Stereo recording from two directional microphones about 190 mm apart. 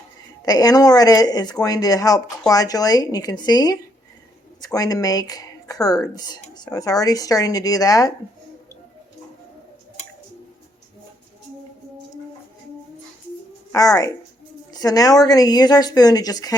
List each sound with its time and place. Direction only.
0.4 s speech: 20° left (ahead or behind)
13.7 s speech: 20° left (ahead or behind)